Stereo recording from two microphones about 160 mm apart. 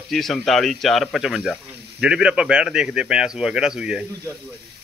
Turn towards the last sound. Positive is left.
turn(degrees=-5)  # may be behind; listen again after turning